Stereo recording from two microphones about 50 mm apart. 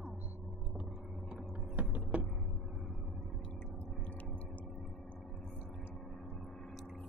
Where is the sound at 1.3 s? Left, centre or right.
Right.